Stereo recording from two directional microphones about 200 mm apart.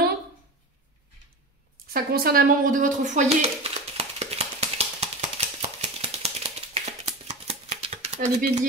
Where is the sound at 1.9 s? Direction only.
50° right (ahead or behind); by 8.5 s 35° right (ahead or behind).